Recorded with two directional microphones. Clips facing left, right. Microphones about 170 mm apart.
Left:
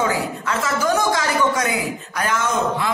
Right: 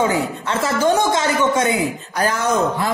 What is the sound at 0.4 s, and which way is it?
Speech, 30° right (ahead or behind).